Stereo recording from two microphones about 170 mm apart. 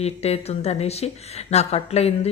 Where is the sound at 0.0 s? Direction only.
40° left (ahead or behind).